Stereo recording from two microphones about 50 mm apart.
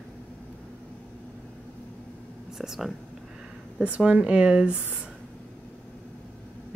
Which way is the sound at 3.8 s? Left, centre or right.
Right.